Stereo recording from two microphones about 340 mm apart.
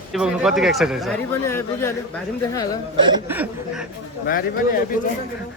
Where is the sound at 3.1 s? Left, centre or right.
Centre.